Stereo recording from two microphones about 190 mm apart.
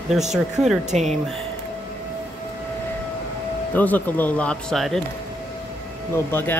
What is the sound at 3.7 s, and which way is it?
Speech, 10° left (ahead or behind).